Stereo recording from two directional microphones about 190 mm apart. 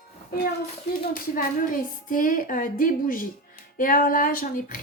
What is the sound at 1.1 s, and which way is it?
Speech, 50° left (ahead or behind).